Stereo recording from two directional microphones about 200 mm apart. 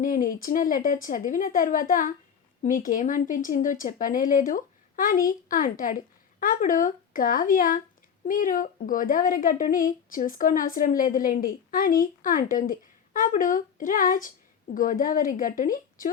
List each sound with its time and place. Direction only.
0.0 s speech: 45° left (ahead or behind)